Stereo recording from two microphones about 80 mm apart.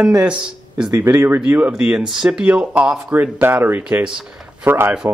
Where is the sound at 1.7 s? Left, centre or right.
Centre.